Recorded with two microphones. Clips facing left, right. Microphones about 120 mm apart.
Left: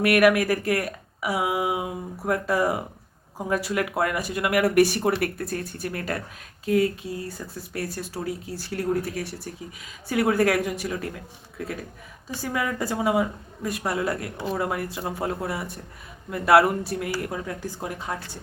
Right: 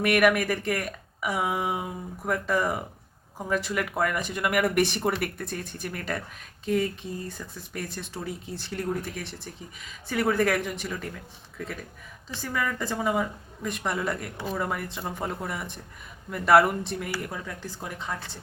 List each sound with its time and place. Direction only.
0.0 s speech: 5° left (ahead or behind)
6.7 s speech: 5° left (ahead or behind)
12.3 s speech: 10° left (ahead or behind)